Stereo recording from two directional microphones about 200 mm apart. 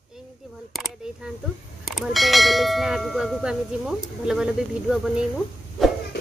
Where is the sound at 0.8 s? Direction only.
Centre (ahead or behind).